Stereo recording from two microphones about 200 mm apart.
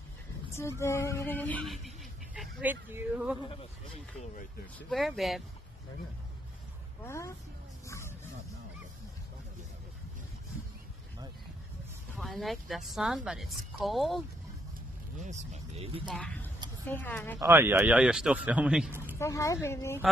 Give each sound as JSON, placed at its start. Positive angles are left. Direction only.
{"t": 0.6, "sound": "speech", "side_deg": 15}
{"t": 3.3, "sound": "speech", "side_deg": 25}
{"t": 4.7, "sound": "speech", "side_deg": 0}
{"t": 7.1, "sound": "a woman's voice", "side_deg": 15}
{"t": 7.8, "sound": "a sound", "side_deg": 15}
{"t": 12.2, "sound": "speech", "side_deg": 0}
{"t": 15.1, "sound": "speech", "side_deg": -35}
{"t": 16.1, "sound": "a woman's voice", "side_deg": 5}
{"t": 17.4, "sound": "speech", "side_deg": -10}
{"t": 19.1, "sound": "a woman's voice", "side_deg": 15}